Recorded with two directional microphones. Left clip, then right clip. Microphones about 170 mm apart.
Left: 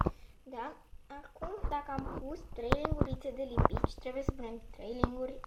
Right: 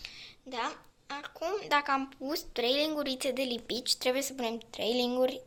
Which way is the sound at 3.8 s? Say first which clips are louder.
Right 7 dB; 25° right (ahead or behind).